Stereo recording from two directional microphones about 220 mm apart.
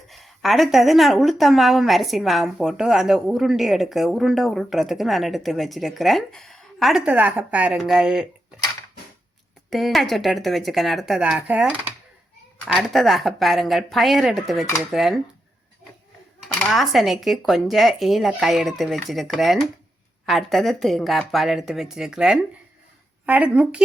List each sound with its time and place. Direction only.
0.1 s speech: centre (ahead or behind)
9.6 s speech: centre (ahead or behind)
16.6 s speech: centre (ahead or behind)